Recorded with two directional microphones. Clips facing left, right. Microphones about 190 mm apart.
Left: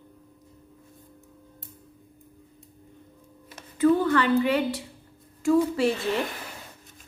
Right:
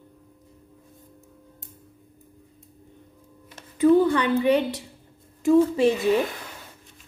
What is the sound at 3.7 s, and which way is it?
A woman's voice, 15° right (ahead or behind).